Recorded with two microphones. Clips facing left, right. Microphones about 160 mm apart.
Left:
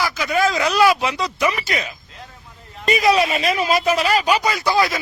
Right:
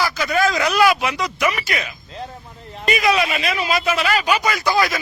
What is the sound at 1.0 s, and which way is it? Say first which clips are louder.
Speech: left 1 dB; 25° left (ahead or behind).